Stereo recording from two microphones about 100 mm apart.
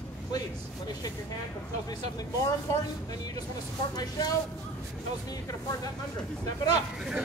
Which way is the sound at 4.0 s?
40° left (ahead or behind).